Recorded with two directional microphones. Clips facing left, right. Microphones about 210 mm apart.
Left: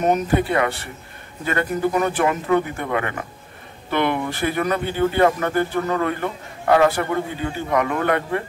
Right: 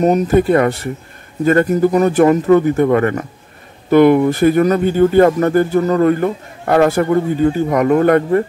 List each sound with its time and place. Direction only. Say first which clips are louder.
0.0 s speech: right 7 dB; 40° right (ahead or behind)